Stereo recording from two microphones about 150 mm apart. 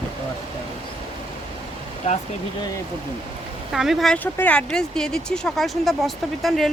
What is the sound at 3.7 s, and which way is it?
Speech, centre (ahead or behind).